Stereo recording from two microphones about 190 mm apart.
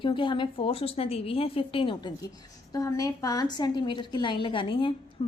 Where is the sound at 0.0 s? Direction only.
25° left (ahead or behind).